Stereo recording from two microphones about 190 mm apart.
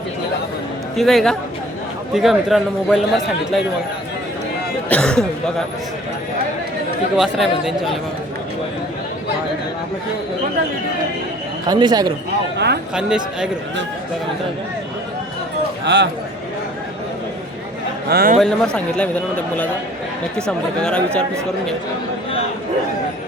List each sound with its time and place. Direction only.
0.9 s a man's voice: centre (ahead or behind)
4.9 s a man's voice: 5° left (ahead or behind)
7.2 s a man's voice: centre (ahead or behind)
11.7 s speech: 20° right (ahead or behind)
12.5 s speech: 60° right (ahead or behind)
12.9 s a man's voice: 5° right (ahead or behind)
15.8 s a man's voice: 65° right (ahead or behind)
18.1 s speech: 50° right (ahead or behind)
18.3 s a man's voice: 5° left (ahead or behind)
20.8 s a man's voice: 5° left (ahead or behind)